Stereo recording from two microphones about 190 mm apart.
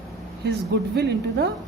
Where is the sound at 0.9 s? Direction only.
60° right (ahead or behind).